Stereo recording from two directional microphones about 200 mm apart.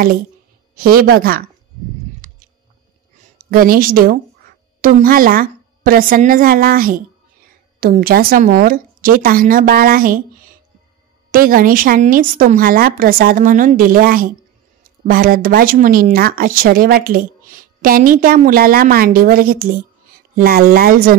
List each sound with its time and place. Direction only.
0.7 s speech: 45° right (ahead or behind)
2.2 s a sound: 35° right (ahead or behind)
3.3 s a woman's voice: 45° right (ahead or behind)
11.3 s speech: 45° right (ahead or behind)